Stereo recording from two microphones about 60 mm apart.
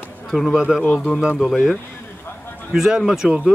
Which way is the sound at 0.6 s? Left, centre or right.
Centre.